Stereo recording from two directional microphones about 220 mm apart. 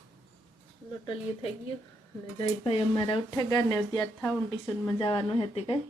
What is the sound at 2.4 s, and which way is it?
Speech, 25° left (ahead or behind).